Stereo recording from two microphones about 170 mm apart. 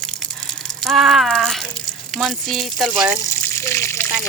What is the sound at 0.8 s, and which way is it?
Speech, centre (ahead or behind).